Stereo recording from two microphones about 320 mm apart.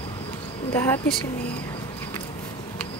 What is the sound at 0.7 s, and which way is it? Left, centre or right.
Speech, centre.